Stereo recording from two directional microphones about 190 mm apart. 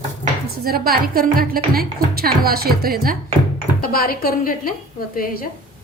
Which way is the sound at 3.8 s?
50° left (ahead or behind).